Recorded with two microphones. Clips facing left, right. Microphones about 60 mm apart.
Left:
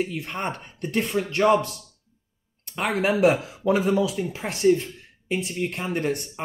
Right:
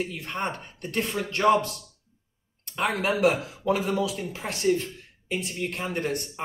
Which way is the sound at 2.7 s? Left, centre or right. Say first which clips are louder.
Left 2 dB; left.